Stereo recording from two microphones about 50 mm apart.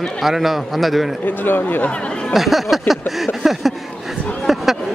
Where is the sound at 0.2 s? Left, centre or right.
Centre.